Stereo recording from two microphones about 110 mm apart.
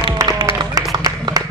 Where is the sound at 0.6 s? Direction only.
35° right (ahead or behind).